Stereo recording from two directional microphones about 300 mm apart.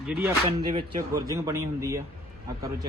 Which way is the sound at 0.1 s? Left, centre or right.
Centre.